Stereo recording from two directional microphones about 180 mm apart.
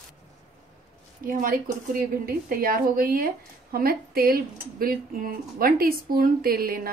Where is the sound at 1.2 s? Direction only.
50° right (ahead or behind).